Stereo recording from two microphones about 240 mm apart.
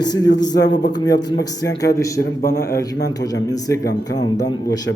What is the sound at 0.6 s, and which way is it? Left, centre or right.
Speech, left.